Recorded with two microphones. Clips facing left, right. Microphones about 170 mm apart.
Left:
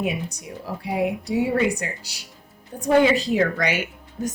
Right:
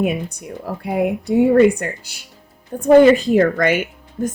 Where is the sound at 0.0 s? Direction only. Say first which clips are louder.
Right 6 dB; 55° right (ahead or behind).